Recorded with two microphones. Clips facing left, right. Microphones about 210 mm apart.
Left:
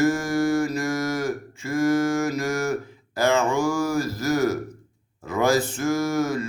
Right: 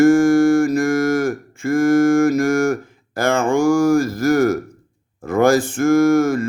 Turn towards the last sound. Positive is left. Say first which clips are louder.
# right 9 dB
turn(degrees=-50)  # may be behind; listen again after turning